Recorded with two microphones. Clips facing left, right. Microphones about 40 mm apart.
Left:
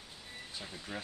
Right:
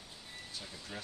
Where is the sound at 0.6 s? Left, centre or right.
Left.